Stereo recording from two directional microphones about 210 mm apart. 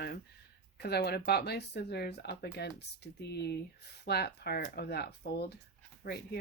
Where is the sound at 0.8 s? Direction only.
50° left (ahead or behind).